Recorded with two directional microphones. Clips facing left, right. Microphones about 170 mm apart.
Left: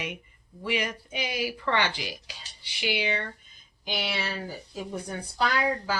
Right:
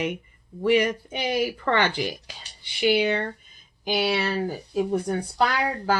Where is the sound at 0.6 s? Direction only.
50° right (ahead or behind).